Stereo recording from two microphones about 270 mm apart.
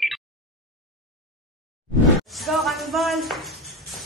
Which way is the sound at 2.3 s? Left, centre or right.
Centre.